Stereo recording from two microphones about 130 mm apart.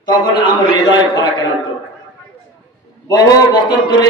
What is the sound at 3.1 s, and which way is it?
Speech, 30° left (ahead or behind).